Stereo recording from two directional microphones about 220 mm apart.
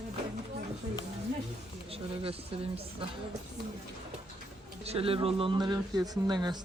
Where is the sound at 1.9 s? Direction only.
25° right (ahead or behind).